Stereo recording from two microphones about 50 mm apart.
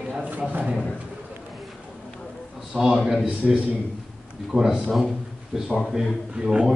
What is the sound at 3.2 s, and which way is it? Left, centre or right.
A man's voice, right.